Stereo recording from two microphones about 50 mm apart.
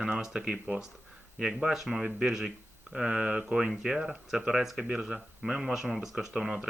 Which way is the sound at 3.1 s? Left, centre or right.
Centre.